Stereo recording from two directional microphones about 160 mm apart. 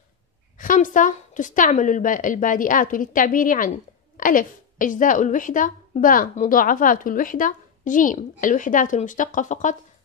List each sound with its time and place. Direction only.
0.6 s a woman's voice: 55° left (ahead or behind)